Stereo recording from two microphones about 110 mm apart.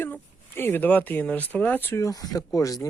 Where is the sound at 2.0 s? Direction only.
35° left (ahead or behind).